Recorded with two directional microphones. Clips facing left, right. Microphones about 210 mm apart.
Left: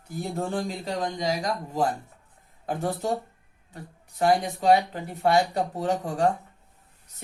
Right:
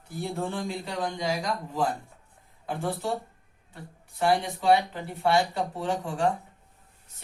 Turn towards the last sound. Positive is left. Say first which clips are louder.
# left 3 dB
turn(degrees=40)  # may be behind; listen again after turning